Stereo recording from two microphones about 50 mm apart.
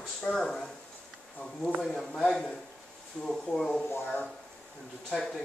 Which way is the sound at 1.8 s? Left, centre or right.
Centre.